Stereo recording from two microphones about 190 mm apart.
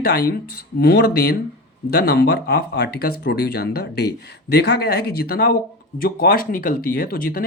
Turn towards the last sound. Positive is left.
turn(degrees=50)  # may be behind; listen again after turning